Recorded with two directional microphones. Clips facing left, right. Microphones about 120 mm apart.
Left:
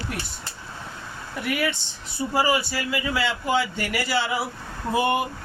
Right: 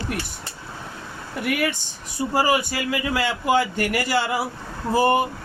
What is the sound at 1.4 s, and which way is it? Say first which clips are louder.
A man's voice: right 2 dB; 55° right (ahead or behind).